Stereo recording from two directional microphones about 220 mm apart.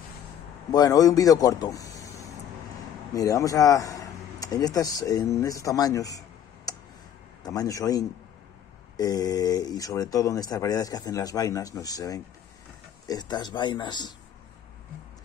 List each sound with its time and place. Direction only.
0.7 s speech: 15° left (ahead or behind)
2.0 s vehicle: 15° left (ahead or behind)
3.1 s speech: 15° left (ahead or behind)